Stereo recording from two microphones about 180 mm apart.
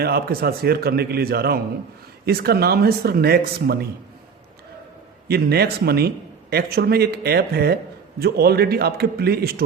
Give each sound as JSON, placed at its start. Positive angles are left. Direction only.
{"t": 0.0, "sound": "speech", "side_deg": -60}
{"t": 5.3, "sound": "speech", "side_deg": -60}